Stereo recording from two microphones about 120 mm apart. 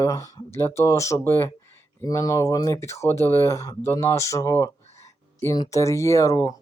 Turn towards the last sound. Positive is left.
turn(degrees=30)  # may be behind; listen again after turning